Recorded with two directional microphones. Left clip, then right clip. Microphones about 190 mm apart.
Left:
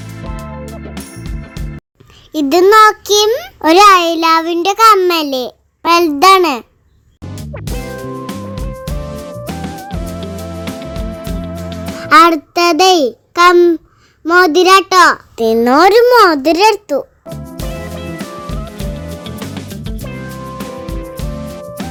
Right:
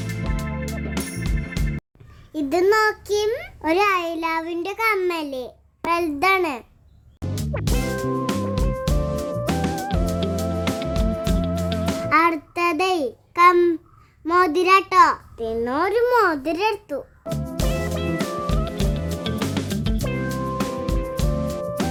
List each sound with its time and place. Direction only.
0.0 s music: centre (ahead or behind)
2.3 s a child's voice: 25° left (ahead or behind)
7.2 s music: centre (ahead or behind)
12.0 s a child's voice: 30° left (ahead or behind)
15.4 s a child's voice: 40° left (ahead or behind)
16.0 s a child's voice: 30° left (ahead or behind)
17.2 s music: centre (ahead or behind)